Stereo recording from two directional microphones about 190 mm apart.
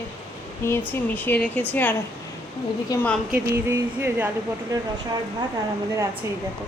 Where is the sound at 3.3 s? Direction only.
10° right (ahead or behind).